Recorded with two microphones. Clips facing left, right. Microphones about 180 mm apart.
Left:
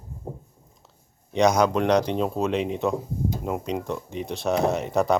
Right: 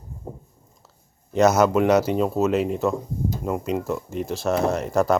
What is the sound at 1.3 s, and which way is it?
Speech, 5° right (ahead or behind).